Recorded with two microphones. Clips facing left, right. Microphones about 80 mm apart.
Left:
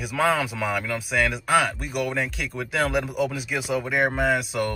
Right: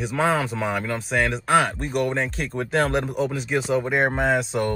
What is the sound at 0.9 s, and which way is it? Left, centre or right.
Speech, centre.